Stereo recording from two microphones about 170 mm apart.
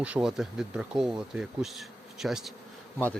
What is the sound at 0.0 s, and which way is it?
Speech, 5° right (ahead or behind).